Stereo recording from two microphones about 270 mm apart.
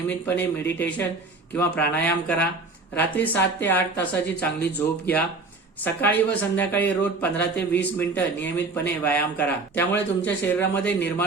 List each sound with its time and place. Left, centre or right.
0.1 s speech: centre
5.8 s speech: centre